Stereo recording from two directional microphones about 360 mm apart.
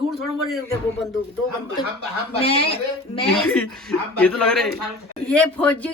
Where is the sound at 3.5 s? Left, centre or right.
Centre.